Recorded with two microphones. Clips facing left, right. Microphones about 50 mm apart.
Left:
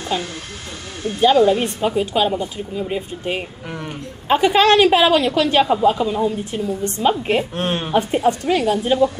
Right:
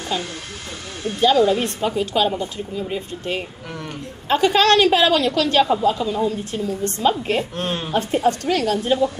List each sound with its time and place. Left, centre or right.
0.1 s speech: centre